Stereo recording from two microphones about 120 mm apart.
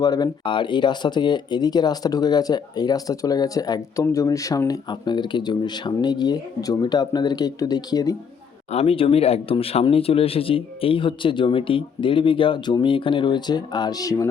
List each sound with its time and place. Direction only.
0.0 s speech: 35° left (ahead or behind)
8.7 s speech: 55° left (ahead or behind); by 14.3 s 30° left (ahead or behind)